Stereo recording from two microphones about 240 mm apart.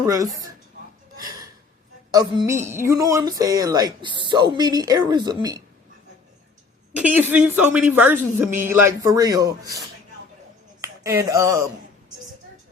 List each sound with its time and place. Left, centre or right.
0.0 s a man's voice: centre
2.0 s a man's voice: centre
6.9 s a man's voice: centre